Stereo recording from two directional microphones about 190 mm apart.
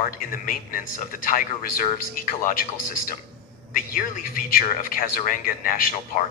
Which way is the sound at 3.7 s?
45° left (ahead or behind).